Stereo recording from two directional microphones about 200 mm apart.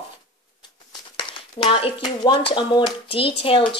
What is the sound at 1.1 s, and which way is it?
Speech, 25° left (ahead or behind).